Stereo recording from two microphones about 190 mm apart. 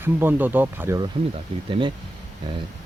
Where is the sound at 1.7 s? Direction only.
25° right (ahead or behind).